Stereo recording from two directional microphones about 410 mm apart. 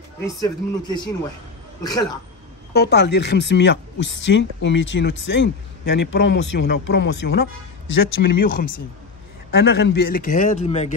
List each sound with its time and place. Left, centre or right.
0.4 s a man's voice: centre
2.7 s speech: left